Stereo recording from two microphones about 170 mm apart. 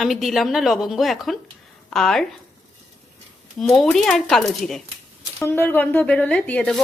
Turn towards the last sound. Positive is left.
turn(degrees=5)  # may be behind; listen again after turning